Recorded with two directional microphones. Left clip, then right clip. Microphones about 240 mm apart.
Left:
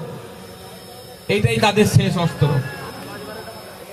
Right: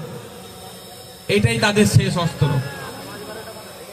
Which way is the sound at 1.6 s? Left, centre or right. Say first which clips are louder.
Left 1 dB; right.